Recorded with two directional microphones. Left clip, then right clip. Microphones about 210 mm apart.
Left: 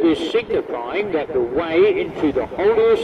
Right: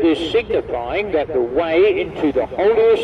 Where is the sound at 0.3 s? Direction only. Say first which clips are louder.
Right 2 dB; 35° right (ahead or behind).